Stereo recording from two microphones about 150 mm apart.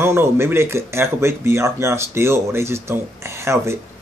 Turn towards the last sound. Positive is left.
turn(degrees=-20)  # may be behind; listen again after turning